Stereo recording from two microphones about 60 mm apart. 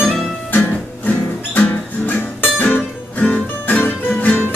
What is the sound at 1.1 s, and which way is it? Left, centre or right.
Music, left.